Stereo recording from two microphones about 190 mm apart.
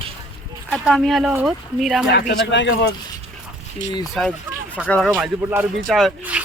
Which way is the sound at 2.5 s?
70° left (ahead or behind).